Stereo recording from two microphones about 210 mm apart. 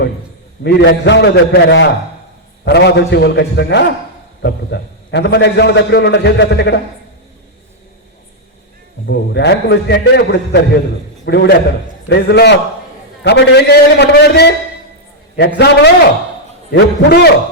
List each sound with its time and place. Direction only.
0.6 s a man's voice: 55° left (ahead or behind)
9.0 s a man's voice: 55° left (ahead or behind)